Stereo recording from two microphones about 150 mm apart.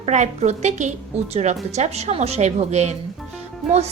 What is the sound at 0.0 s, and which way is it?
A woman's voice, 50° right (ahead or behind).